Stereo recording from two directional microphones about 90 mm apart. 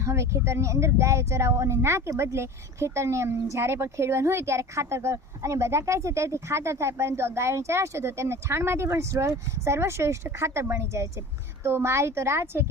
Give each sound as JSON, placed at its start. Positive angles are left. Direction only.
{"t": 0.0, "sound": "a woman's voice", "side_deg": -35}